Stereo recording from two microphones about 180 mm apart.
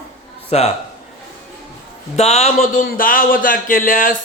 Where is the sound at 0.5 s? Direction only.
40° left (ahead or behind).